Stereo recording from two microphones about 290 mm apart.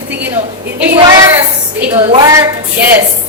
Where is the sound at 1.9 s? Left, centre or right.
Centre.